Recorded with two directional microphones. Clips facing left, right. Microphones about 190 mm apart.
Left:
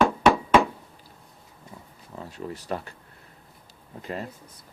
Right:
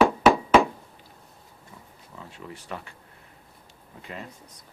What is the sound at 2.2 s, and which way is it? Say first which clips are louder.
Speech: left 6 dB; 40° left (ahead or behind).